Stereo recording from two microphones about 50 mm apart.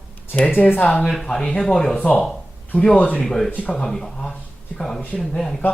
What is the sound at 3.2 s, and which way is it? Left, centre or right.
Speech, centre.